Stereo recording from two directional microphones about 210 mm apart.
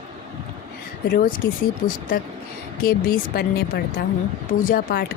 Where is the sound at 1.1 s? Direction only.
40° left (ahead or behind).